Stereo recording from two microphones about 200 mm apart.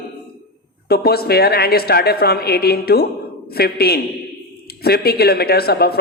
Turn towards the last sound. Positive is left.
turn(degrees=50)  # may be behind; listen again after turning